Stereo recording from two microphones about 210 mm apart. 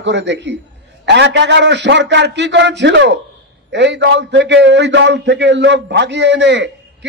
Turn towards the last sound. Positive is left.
turn(degrees=-55)  # may be behind; listen again after turning